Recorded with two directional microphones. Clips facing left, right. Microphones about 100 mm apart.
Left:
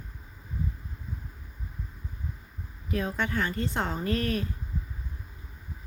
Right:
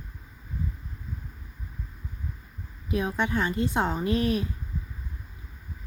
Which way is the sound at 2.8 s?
20° right (ahead or behind).